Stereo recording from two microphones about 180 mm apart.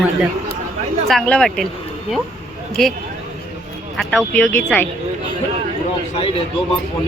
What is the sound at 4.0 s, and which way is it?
Speech, 5° left (ahead or behind).